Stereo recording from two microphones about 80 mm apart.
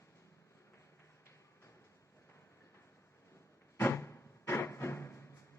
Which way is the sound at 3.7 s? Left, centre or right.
Left.